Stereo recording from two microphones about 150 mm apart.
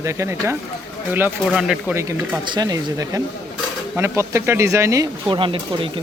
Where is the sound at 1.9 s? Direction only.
20° right (ahead or behind).